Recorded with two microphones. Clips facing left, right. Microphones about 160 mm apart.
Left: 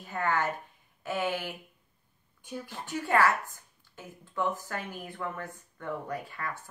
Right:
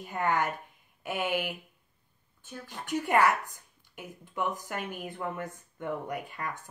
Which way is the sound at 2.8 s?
15° right (ahead or behind).